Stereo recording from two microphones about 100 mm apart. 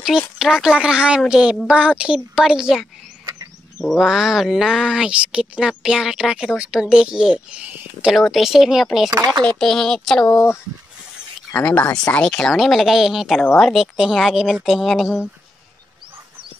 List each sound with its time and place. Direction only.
0.4 s speech: 5° right (ahead or behind)
3.3 s frog: 35° right (ahead or behind)
3.8 s speech: centre (ahead or behind)
8.1 s speech: centre (ahead or behind)
9.1 s speech: 35° right (ahead or behind)
9.6 s speech: 5° left (ahead or behind)
10.2 s speech: 25° left (ahead or behind)
11.5 s speech: 15° left (ahead or behind); by 15.1 s centre (ahead or behind)